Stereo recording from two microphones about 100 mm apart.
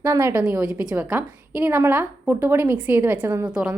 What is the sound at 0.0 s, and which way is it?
Speech, 30° right (ahead or behind).